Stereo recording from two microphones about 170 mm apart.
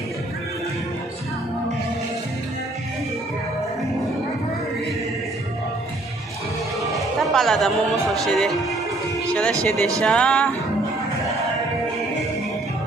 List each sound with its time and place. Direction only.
7.0 s speech: centre (ahead or behind)
9.6 s music: centre (ahead or behind)